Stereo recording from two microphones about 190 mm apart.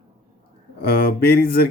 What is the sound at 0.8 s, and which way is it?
Speech, 55° left (ahead or behind).